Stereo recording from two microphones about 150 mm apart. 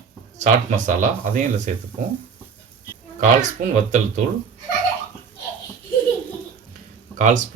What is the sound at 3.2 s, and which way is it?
Speech, 55° right (ahead or behind).